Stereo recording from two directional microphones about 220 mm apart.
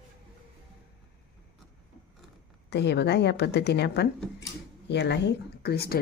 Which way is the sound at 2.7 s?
50° left (ahead or behind).